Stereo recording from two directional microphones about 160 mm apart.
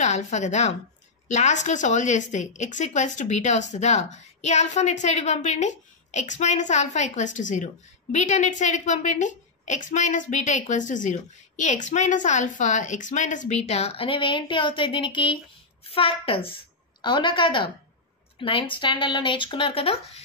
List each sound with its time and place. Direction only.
0.0 s a woman's voice: 50° left (ahead or behind)